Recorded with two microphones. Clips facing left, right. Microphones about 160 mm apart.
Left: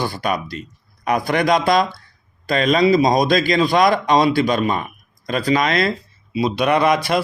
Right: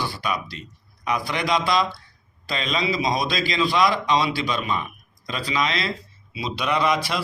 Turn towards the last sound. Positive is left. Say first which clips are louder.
# left 6 dB
turn(degrees=55)  # may be behind; listen again after turning